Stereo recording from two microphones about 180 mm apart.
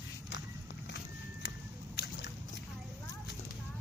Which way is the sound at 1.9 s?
65° left (ahead or behind).